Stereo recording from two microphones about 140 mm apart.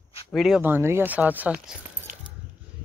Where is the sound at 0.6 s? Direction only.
15° right (ahead or behind).